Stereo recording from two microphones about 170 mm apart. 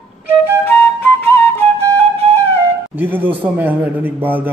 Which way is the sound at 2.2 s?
35° right (ahead or behind).